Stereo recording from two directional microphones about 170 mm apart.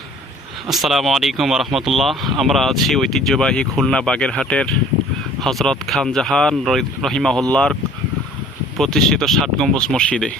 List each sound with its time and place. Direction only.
0.7 s speech: centre (ahead or behind)
8.8 s speech: 5° left (ahead or behind)